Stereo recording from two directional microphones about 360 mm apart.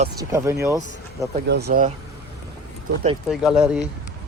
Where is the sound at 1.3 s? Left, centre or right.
Right.